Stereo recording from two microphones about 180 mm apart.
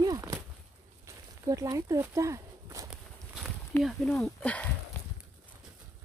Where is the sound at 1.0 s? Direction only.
20° right (ahead or behind).